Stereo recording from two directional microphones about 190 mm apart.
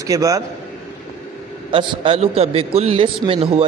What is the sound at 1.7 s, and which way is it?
A man's voice, 30° right (ahead or behind).